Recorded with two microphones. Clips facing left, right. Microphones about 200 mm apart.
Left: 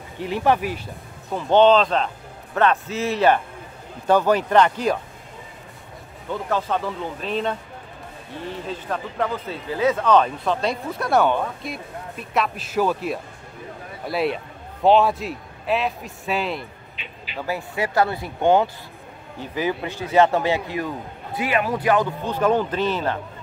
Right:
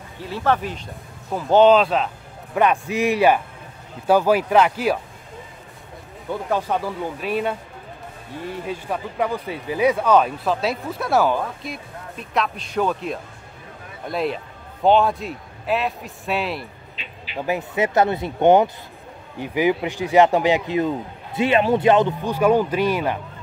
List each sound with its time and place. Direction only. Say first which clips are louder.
0.2 s speech: left 2 dB; 15° left (ahead or behind)
1.3 s a man's voice: right 1 dB; 5° right (ahead or behind)
6.5 s a man's voice: right 1 dB; 10° right (ahead or behind)
17.4 s a man's voice: right 4 dB; 20° right (ahead or behind)
22.3 s a man's voice: right 2 dB; 10° right (ahead or behind)